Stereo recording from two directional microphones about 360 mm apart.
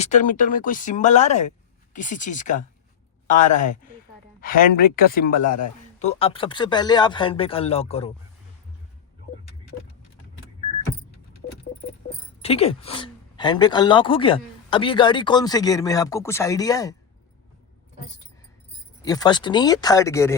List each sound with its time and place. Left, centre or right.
0.0 s speech: centre
11.8 s speech: centre
19.0 s speech: centre